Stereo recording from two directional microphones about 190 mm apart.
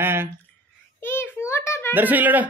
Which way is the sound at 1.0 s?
10° left (ahead or behind).